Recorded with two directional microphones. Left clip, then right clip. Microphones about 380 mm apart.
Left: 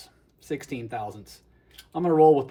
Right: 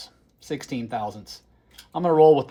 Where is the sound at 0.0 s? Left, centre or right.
Centre.